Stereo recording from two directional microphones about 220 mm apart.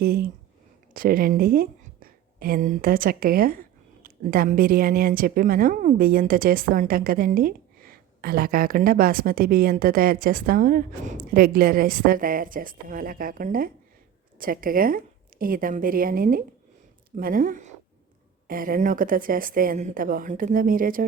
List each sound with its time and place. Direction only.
0.0 s a woman's voice: 40° right (ahead or behind)